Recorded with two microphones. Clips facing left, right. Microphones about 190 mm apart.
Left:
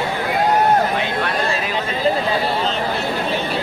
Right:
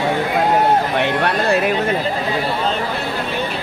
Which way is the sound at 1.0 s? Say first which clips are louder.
Right 3 dB; 65° right (ahead or behind).